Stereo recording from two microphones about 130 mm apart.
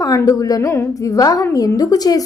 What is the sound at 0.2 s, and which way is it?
A woman's voice, 25° left (ahead or behind).